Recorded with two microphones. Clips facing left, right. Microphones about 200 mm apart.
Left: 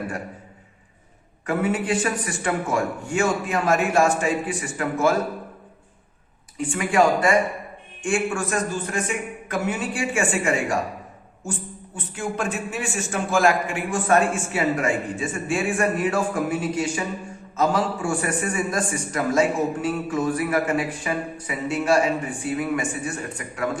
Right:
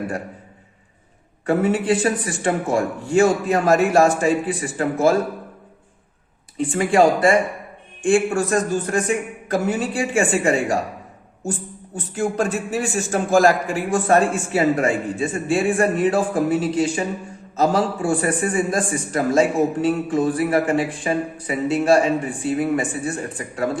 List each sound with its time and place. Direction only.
1.5 s a man's voice: 35° right (ahead or behind)
6.6 s a man's voice: 35° right (ahead or behind)
11.9 s a man's voice: 40° right (ahead or behind)